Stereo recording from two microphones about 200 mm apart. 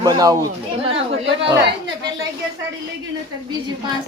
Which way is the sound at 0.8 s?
30° right (ahead or behind).